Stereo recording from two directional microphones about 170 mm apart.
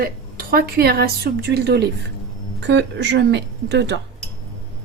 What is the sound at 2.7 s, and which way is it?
Speech, 90° right.